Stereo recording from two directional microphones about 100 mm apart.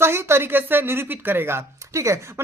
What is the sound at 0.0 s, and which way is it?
A woman's voice, 25° right (ahead or behind).